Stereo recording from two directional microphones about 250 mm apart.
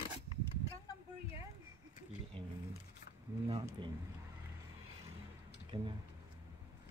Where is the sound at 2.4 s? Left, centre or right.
Right.